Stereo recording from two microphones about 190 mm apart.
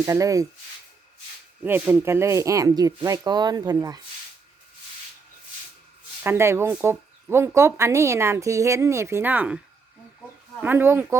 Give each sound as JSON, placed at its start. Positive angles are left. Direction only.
{"t": 0.0, "sound": "speech", "side_deg": -15}
{"t": 1.6, "sound": "speech", "side_deg": -10}
{"t": 6.2, "sound": "speech", "side_deg": -15}
{"t": 10.6, "sound": "speech", "side_deg": -10}